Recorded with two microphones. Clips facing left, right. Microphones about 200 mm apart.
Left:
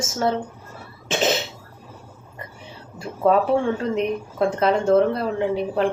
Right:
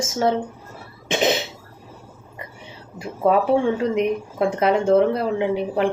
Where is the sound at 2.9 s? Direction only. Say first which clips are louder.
Even; 15° right (ahead or behind).